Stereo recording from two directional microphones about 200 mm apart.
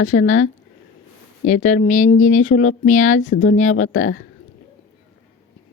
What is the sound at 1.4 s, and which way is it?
Speech, 35° left (ahead or behind).